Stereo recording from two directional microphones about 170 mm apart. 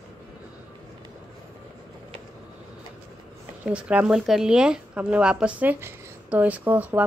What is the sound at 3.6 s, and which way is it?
Speech, 5° right (ahead or behind).